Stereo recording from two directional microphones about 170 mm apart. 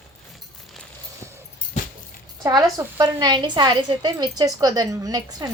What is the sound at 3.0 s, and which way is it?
A woman's voice, 25° right (ahead or behind).